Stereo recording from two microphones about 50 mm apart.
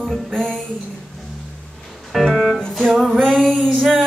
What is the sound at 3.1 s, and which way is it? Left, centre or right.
Music, centre.